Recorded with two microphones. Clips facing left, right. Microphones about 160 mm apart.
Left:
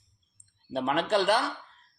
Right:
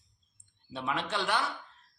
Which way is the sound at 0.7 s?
50° left (ahead or behind).